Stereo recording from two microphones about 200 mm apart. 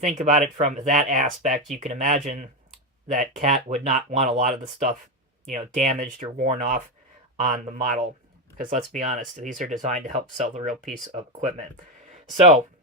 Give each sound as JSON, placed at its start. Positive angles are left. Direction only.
{"t": 0.0, "sound": "speech", "side_deg": -40}